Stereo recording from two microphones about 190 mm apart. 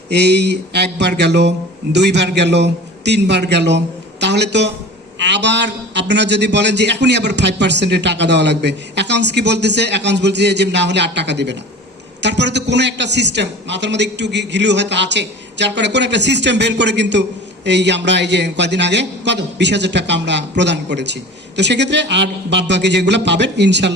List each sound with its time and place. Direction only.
0.1 s a man's voice: 60° right (ahead or behind)